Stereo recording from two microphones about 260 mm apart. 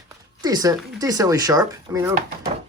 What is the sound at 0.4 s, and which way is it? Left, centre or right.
Speech, centre.